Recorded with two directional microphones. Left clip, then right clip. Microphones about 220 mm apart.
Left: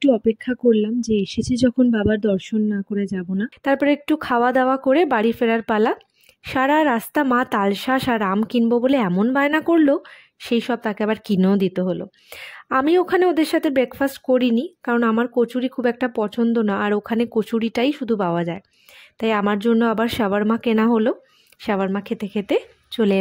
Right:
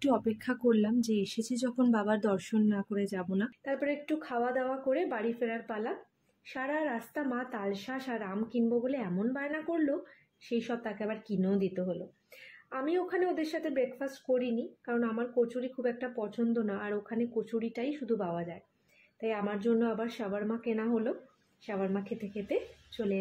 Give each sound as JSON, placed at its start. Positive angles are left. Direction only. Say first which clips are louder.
{"t": 0.0, "sound": "speech", "louder": "left 12 dB", "side_deg": 30}
{"t": 3.6, "sound": "speech", "louder": "left 17 dB", "side_deg": 50}